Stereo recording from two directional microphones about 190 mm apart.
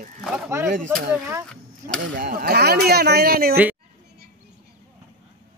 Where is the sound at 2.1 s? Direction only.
50° right (ahead or behind).